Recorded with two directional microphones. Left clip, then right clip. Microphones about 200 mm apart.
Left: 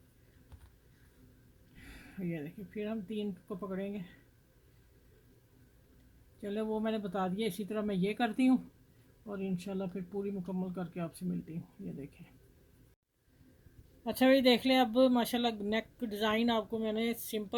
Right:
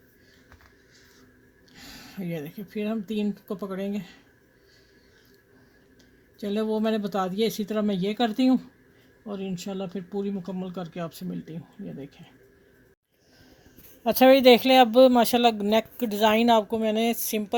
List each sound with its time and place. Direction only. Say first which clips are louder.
1.8 s speech: right 6 dB; 55° right (ahead or behind)
6.4 s speech: right 9 dB; 55° right (ahead or behind); by 11.5 s 40° right (ahead or behind)
14.0 s speech: right 11 dB; 35° right (ahead or behind)